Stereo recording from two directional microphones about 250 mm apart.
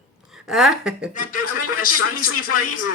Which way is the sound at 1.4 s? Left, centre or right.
Left.